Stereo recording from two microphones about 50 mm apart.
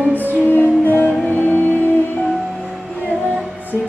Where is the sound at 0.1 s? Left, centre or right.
Left.